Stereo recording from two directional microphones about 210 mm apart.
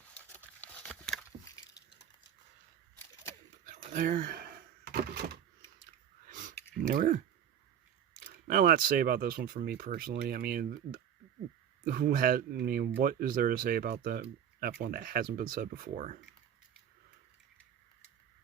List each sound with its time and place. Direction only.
0.1 s patter: 5° left (ahead or behind)
3.9 s speech: 40° right (ahead or behind)
6.2 s a sound: 40° right (ahead or behind)
6.7 s speech: 40° right (ahead or behind)
8.2 s speech: 45° right (ahead or behind)